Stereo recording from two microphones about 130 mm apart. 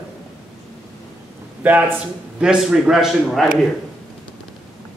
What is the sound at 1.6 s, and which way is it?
A man's voice, 10° right (ahead or behind).